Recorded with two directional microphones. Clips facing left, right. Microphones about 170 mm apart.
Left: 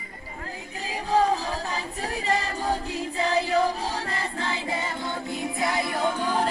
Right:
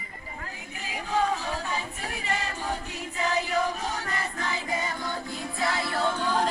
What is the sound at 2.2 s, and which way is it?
A capella, 35° left (ahead or behind).